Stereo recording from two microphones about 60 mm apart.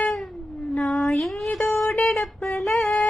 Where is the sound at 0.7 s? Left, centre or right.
Centre.